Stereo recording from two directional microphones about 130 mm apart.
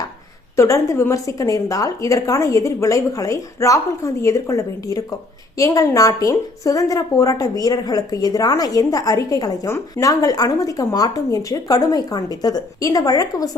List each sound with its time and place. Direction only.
0.5 s a woman's voice: 25° left (ahead or behind)